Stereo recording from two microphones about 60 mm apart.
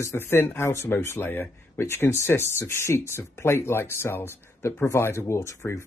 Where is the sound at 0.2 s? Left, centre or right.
Left.